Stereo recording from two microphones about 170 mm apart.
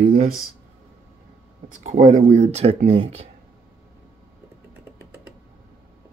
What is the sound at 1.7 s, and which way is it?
Speech, 45° right (ahead or behind).